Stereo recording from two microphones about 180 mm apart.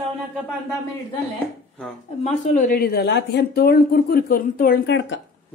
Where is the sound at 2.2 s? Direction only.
45° left (ahead or behind); by 5.2 s 80° left.